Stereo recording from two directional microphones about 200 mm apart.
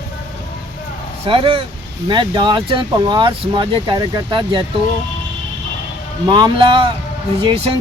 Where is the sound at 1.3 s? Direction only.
25° right (ahead or behind).